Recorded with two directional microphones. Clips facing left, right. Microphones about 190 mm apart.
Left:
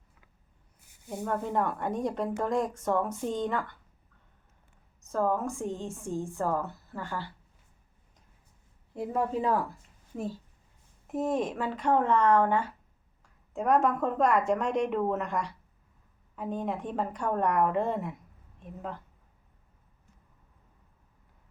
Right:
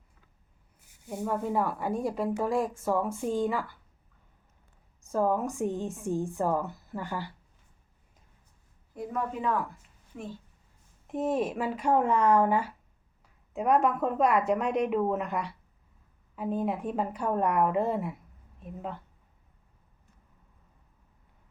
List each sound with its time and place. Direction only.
1.1 s speech: 5° right (ahead or behind)
5.0 s a woman's voice: 15° right (ahead or behind)
9.0 s a woman's voice: 30° left (ahead or behind)
11.0 s a woman's voice: centre (ahead or behind)